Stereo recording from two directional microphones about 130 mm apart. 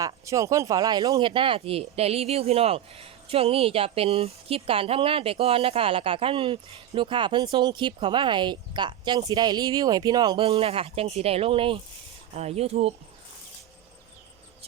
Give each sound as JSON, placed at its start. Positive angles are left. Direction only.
{"t": 0.0, "sound": "speech", "side_deg": -25}
{"t": 10.4, "sound": "speech", "side_deg": -50}
{"t": 12.3, "sound": "speech", "side_deg": -55}
{"t": 14.6, "sound": "a sound", "side_deg": -50}